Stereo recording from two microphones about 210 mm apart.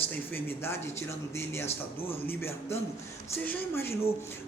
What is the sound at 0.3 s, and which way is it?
Speech, 10° left (ahead or behind).